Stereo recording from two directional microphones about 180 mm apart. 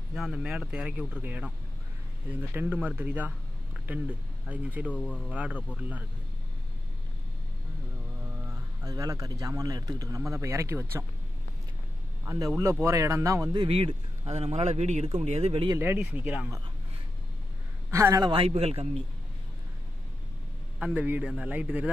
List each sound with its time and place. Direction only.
0.1 s speech: centre (ahead or behind)
2.5 s speech: 10° right (ahead or behind)
4.9 s speech: 5° left (ahead or behind)
5.3 s speech: 10° right (ahead or behind)
8.8 s speech: 20° right (ahead or behind)
12.3 s speech: 15° right (ahead or behind)
13.7 s a man's voice: 30° right (ahead or behind)
15.8 s speech: 10° right (ahead or behind)
17.9 s speech: 20° right (ahead or behind)
20.8 s speech: 10° right (ahead or behind)